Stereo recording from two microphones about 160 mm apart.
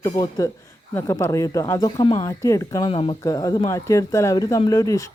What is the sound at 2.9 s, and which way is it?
Speech, 35° left (ahead or behind).